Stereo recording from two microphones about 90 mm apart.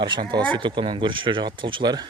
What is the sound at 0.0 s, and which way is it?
Speech, 55° right (ahead or behind).